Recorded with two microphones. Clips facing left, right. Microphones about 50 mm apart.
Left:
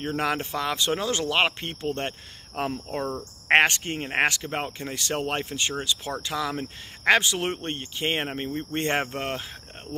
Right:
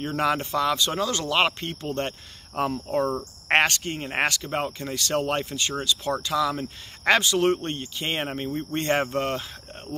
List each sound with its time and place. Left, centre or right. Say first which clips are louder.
0.0 s speech: right 2 dB; centre